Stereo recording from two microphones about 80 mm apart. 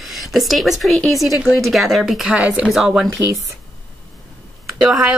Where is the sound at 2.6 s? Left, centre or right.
Centre.